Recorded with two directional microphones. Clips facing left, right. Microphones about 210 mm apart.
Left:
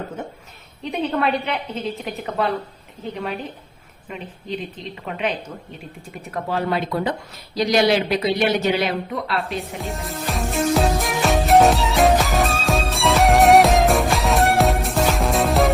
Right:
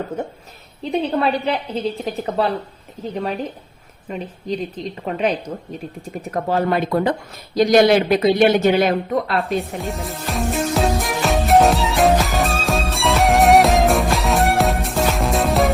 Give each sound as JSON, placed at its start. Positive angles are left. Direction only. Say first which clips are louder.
{"t": 0.8, "sound": "a woman's voice", "louder": "right 3 dB", "side_deg": -35}
{"t": 4.1, "sound": "a woman's voice", "louder": "right 5 dB", "side_deg": -40}
{"t": 6.3, "sound": "speech", "louder": "right 4 dB", "side_deg": -45}
{"t": 9.6, "sound": "music", "louder": "right 4 dB", "side_deg": 0}